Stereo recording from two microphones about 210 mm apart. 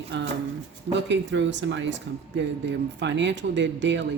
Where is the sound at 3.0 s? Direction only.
55° right (ahead or behind).